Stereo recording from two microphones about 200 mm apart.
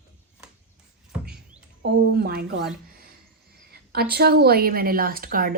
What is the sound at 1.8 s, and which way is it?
Speech, 50° right (ahead or behind).